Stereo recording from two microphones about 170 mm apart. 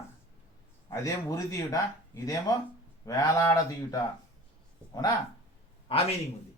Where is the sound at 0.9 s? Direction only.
20° left (ahead or behind).